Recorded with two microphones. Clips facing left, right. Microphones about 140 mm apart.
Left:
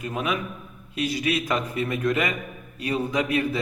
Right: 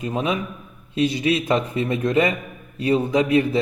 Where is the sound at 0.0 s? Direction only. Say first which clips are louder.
Right 4 dB; 25° right (ahead or behind).